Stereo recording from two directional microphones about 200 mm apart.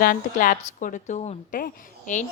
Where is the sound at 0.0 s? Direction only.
45° left (ahead or behind).